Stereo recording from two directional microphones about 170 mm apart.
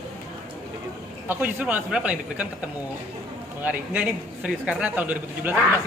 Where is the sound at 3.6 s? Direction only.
10° right (ahead or behind).